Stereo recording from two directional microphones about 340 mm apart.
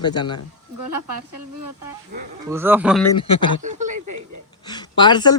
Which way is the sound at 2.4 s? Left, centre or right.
Centre.